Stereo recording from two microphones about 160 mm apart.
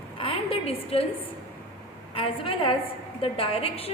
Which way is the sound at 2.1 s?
35° left (ahead or behind).